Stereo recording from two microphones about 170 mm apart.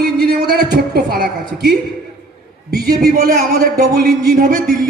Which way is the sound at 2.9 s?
60° right (ahead or behind).